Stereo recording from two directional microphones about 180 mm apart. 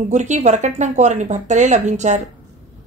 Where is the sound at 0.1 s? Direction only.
40° right (ahead or behind).